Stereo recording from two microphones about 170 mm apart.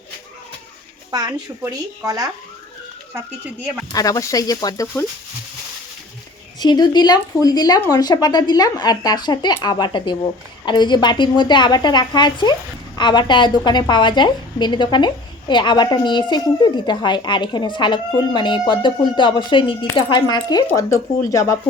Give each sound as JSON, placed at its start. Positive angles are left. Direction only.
{"t": 1.1, "sound": "a woman's voice", "side_deg": -25}
{"t": 3.9, "sound": "a woman's voice", "side_deg": 20}
{"t": 6.6, "sound": "a woman's voice", "side_deg": 25}